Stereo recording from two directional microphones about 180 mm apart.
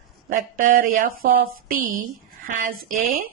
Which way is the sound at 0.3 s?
50° right (ahead or behind).